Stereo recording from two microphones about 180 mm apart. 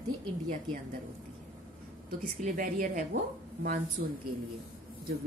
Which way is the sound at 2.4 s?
50° right (ahead or behind).